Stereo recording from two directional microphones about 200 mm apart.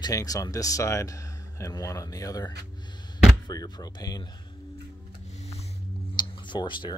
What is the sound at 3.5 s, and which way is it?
Speech, 20° left (ahead or behind).